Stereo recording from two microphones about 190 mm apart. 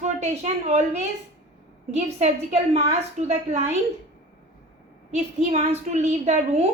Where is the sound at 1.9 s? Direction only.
35° right (ahead or behind).